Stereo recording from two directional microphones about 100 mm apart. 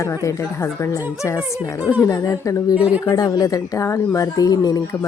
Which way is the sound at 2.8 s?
15° right (ahead or behind).